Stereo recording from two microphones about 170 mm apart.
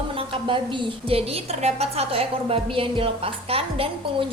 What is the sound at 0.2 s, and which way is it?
A woman's voice, 30° right (ahead or behind).